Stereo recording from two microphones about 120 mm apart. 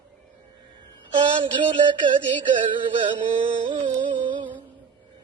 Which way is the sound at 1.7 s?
40° right (ahead or behind).